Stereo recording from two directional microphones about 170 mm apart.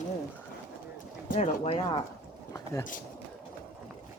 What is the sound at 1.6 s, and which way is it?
Speech, 35° left (ahead or behind).